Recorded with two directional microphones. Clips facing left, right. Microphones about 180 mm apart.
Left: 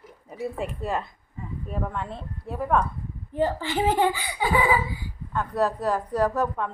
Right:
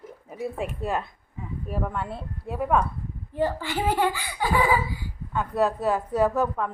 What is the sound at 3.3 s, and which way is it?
A child's voice, 20° left (ahead or behind).